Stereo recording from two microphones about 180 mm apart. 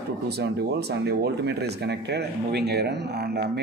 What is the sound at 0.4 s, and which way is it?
Speech, 65° right (ahead or behind).